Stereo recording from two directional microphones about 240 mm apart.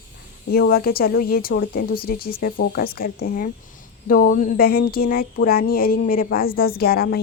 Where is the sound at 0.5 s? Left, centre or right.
Left.